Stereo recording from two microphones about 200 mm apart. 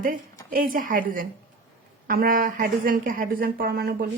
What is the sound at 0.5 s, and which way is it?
Speech, 45° right (ahead or behind).